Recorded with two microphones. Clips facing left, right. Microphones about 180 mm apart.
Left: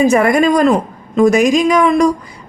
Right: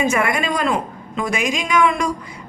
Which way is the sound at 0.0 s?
40° left (ahead or behind).